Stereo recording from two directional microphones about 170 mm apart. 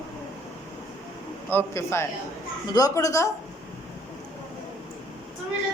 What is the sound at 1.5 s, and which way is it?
A man's voice, 15° left (ahead or behind).